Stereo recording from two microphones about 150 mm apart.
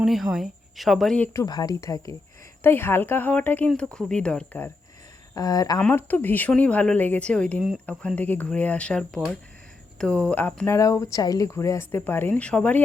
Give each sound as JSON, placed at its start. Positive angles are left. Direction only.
{"t": 0.0, "sound": "speech", "side_deg": 0}
{"t": 1.3, "sound": "speech", "side_deg": 20}
{"t": 5.3, "sound": "speech", "side_deg": 25}
{"t": 5.8, "sound": "speech", "side_deg": 15}
{"t": 10.8, "sound": "speech", "side_deg": 20}